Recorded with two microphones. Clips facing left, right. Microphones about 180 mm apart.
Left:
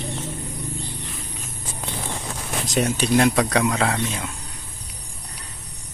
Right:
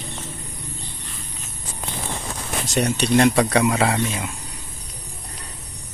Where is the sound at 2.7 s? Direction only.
Centre (ahead or behind).